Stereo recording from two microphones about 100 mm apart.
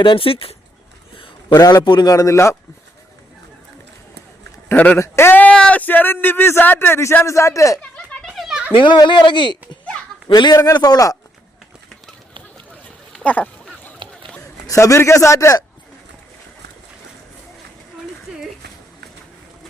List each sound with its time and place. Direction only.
0.0 s speech: 60° left (ahead or behind)
1.5 s a man's voice: 40° left (ahead or behind)
4.7 s speech: 15° left (ahead or behind)
4.9 s speech: 25° left (ahead or behind)
7.8 s a sound: 10° left (ahead or behind)
8.3 s a sound: 5° right (ahead or behind)
8.7 s speech: 55° left (ahead or behind)
10.8 s a man's voice: 40° left (ahead or behind)
13.1 s a sound: 15° left (ahead or behind)
14.0 s run: 55° right (ahead or behind)
14.7 s a man's voice: 30° left (ahead or behind)